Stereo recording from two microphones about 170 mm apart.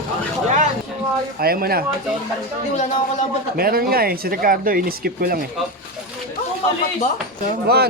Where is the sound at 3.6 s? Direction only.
60° right (ahead or behind).